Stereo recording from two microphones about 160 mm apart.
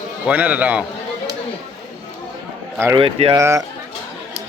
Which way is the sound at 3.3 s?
20° right (ahead or behind).